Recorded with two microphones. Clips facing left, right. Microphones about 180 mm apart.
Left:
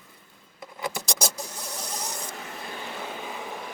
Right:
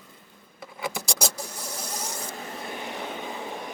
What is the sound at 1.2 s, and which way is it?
Vehicle, 15° left (ahead or behind).